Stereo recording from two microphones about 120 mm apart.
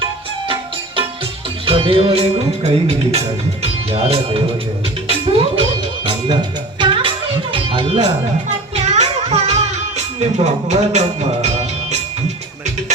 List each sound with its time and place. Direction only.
1.6 s music: 50° right (ahead or behind)
3.6 s speech: 60° right (ahead or behind)
5.0 s music: 50° right (ahead or behind)
6.1 s music: 40° right (ahead or behind)
8.7 s music: 70° right (ahead or behind)